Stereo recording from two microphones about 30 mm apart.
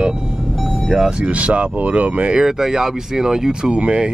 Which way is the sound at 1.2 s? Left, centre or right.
Right.